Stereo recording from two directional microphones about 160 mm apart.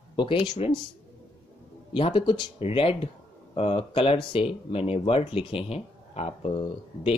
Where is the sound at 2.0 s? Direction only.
30° left (ahead or behind).